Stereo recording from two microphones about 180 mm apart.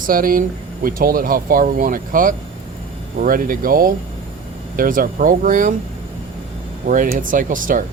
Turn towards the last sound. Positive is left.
turn(degrees=-50)  # may be behind; listen again after turning